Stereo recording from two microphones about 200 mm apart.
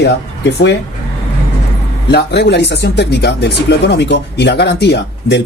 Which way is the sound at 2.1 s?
55° left (ahead or behind).